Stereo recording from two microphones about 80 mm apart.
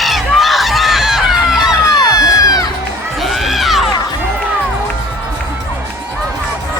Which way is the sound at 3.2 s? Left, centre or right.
Centre.